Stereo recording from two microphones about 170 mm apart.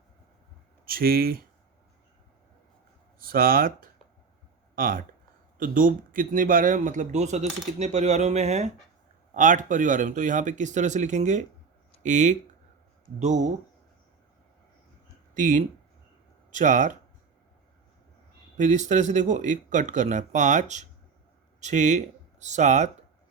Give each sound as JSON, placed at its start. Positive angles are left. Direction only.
{"t": 0.9, "sound": "speech", "side_deg": -60}
{"t": 3.2, "sound": "speech", "side_deg": -60}
{"t": 15.4, "sound": "speech", "side_deg": -50}
{"t": 18.5, "sound": "speech", "side_deg": -45}